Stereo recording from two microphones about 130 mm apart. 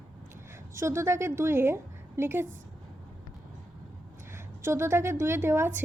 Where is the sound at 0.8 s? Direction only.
20° right (ahead or behind).